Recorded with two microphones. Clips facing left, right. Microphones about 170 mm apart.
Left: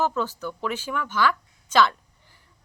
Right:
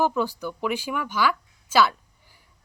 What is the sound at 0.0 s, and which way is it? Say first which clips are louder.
Speech: right 2 dB; 10° right (ahead or behind).